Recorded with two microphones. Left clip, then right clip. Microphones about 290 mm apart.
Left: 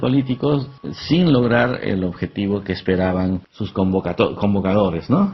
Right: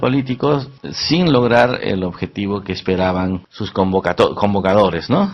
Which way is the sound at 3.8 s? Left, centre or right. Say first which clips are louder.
Right 5 dB; right.